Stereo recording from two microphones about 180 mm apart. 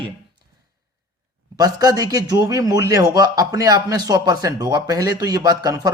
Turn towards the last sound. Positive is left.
turn(degrees=-20)  # may be behind; listen again after turning